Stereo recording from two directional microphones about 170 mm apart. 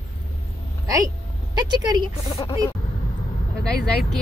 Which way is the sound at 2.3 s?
35° left (ahead or behind).